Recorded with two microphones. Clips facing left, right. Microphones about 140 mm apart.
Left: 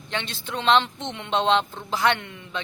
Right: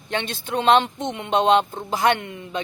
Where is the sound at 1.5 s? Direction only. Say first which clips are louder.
Right 4 dB; 45° right (ahead or behind).